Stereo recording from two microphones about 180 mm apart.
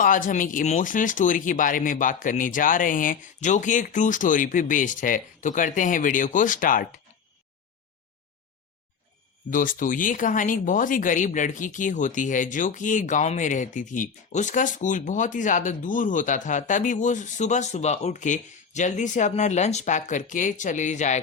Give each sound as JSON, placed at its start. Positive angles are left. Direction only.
{"t": 0.0, "sound": "speech", "side_deg": 45}
{"t": 9.5, "sound": "speech", "side_deg": 50}